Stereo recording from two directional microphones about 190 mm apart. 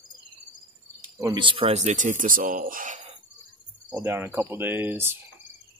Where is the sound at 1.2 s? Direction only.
25° right (ahead or behind); by 3.0 s 45° right (ahead or behind).